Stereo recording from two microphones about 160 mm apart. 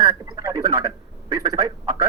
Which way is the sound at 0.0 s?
25° right (ahead or behind).